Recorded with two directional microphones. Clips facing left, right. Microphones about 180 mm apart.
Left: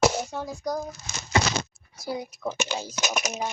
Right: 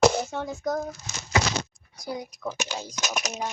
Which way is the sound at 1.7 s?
5° left (ahead or behind).